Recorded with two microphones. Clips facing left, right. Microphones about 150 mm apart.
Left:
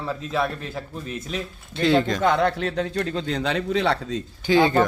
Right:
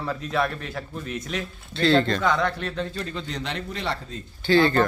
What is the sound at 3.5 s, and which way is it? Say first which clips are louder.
Speech: left 9 dB; 85° left.